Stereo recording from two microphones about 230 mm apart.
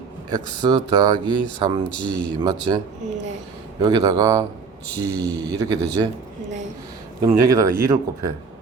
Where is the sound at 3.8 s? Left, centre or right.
Centre.